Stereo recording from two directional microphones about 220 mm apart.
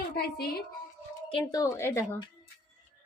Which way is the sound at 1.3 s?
20° left (ahead or behind).